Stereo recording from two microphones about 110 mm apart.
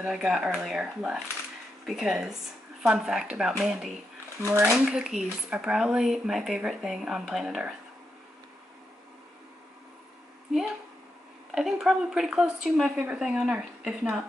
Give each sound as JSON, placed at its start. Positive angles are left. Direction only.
{"t": 0.0, "sound": "speech", "side_deg": -5}
{"t": 4.4, "sound": "speech", "side_deg": -25}
{"t": 4.7, "sound": "speech", "side_deg": -10}
{"t": 11.5, "sound": "speech", "side_deg": -5}